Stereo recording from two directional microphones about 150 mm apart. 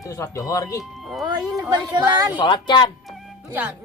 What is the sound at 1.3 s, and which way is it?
A woman's voice, 25° right (ahead or behind).